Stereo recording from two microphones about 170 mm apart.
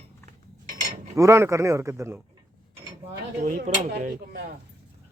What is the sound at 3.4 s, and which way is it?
Cutlery, 50° right (ahead or behind).